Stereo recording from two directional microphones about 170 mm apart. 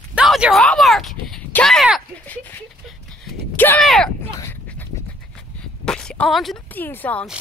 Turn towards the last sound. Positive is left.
turn(degrees=10)  # may be behind; listen again after turning